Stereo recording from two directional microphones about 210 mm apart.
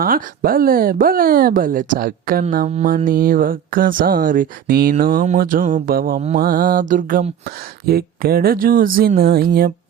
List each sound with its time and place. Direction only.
0.0 s mantra: 45° right (ahead or behind)
2.8 s speech: 40° right (ahead or behind)
6.2 s mantra: 40° right (ahead or behind)